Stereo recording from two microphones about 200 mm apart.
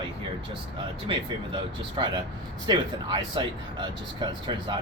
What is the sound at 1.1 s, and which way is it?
Speech, 25° right (ahead or behind).